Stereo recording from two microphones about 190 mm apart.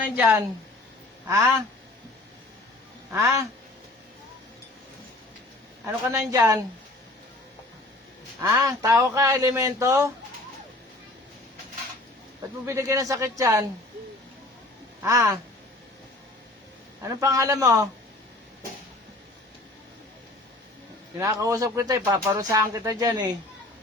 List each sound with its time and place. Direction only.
0.2 s a man's voice: 10° right (ahead or behind)
3.1 s a man's voice: 15° right (ahead or behind)
5.8 s a man's voice: 15° right (ahead or behind)
8.4 s a man's voice: 15° right (ahead or behind)
12.6 s a man's voice: 15° right (ahead or behind)
15.0 s a man's voice: 15° right (ahead or behind)
17.0 s a man's voice: 15° right (ahead or behind)
21.2 s a man's voice: 15° right (ahead or behind)